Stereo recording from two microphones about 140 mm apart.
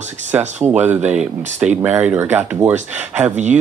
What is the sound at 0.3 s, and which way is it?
Speech, 10° right (ahead or behind).